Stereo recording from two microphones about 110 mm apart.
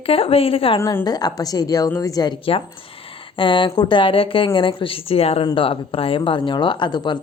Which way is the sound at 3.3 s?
50° left (ahead or behind).